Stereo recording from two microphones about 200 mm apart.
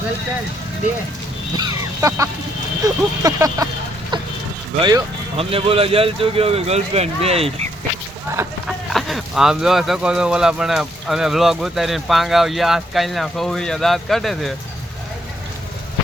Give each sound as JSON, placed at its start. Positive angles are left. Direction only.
{"t": 1.5, "sound": "speech", "side_deg": -20}
{"t": 4.1, "sound": "vehicle", "side_deg": -20}
{"t": 4.8, "sound": "speech", "side_deg": -20}
{"t": 8.6, "sound": "speech", "side_deg": 0}